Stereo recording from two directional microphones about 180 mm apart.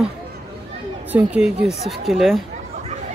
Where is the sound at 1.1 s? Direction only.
5° right (ahead or behind).